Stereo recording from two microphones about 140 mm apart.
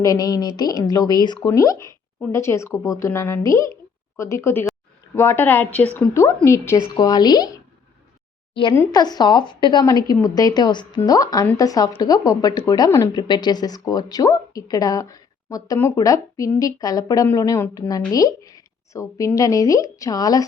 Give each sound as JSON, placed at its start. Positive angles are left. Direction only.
{"t": 0.0, "sound": "speech", "side_deg": 25}
{"t": 8.9, "sound": "a woman's voice", "side_deg": 30}